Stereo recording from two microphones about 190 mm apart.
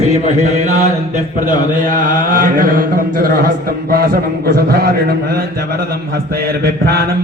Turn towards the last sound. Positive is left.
turn(degrees=-55)  # may be behind; listen again after turning